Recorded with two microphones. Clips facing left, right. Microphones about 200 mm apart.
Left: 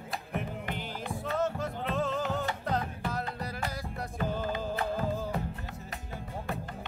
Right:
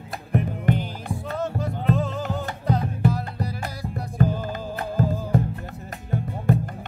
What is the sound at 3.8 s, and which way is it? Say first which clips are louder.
Music: right 9 dB; 45° right (ahead or behind).